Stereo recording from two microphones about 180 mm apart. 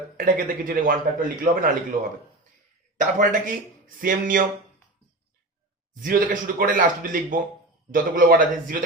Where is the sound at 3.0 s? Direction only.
45° right (ahead or behind).